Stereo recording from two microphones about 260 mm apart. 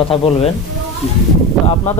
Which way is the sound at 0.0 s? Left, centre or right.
Left.